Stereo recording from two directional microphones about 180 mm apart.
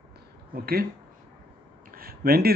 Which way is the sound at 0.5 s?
55° right (ahead or behind).